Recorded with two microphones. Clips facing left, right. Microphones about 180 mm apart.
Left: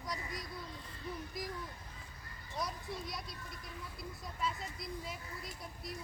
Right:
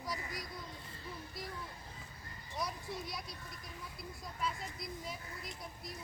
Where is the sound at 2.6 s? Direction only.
Centre (ahead or behind).